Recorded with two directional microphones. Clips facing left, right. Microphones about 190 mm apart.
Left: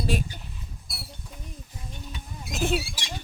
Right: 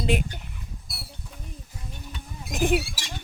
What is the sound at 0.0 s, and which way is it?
Speech, 20° right (ahead or behind).